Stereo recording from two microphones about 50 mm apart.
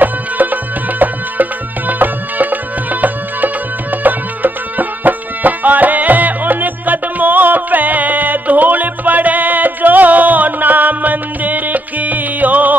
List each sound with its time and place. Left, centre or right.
0.0 s music: right